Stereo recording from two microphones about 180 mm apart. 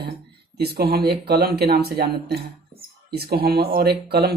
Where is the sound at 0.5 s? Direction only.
60° right (ahead or behind).